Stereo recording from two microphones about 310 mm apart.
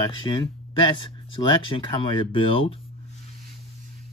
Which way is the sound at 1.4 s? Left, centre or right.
Centre.